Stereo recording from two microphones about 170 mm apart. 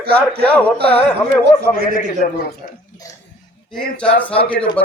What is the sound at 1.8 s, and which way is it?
Speech, 55° right (ahead or behind).